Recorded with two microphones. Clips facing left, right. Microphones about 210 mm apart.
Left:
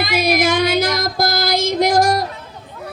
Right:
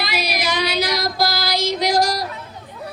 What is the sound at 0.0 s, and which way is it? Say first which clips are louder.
Child singing: left 7 dB; 50° left (ahead or behind).